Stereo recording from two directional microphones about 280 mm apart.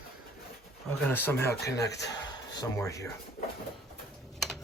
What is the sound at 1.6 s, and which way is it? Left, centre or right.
Speech, left.